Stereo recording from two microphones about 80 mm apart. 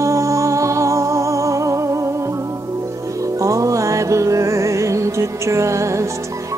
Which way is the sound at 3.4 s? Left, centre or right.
Right.